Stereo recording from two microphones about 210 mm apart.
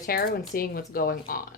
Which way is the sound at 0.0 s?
45° left (ahead or behind).